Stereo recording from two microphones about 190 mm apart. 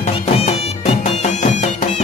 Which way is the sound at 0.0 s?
35° left (ahead or behind).